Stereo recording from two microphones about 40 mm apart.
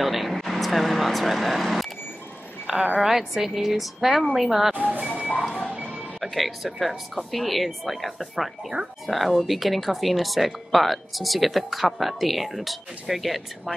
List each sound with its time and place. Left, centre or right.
0.0 s vehicle: centre
2.6 s speech: centre
4.7 s vehicle: right
5.4 s reversing beeps: centre
6.3 s speech: centre